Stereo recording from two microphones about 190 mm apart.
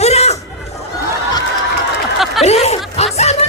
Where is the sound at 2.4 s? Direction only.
35° left (ahead or behind).